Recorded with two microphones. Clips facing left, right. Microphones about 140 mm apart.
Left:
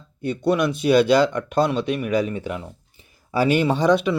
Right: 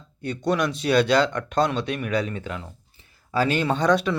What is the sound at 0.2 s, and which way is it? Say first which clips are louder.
Speech: left 3 dB; 10° left (ahead or behind).